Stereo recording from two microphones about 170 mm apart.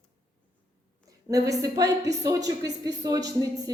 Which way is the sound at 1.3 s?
20° right (ahead or behind).